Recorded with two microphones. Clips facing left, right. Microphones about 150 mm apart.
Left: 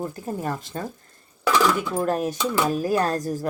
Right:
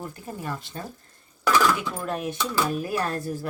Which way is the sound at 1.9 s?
40° left (ahead or behind).